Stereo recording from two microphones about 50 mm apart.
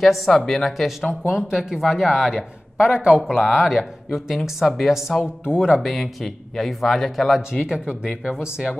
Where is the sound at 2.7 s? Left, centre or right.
Centre.